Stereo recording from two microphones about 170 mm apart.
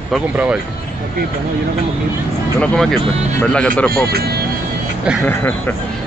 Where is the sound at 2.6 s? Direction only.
5° left (ahead or behind).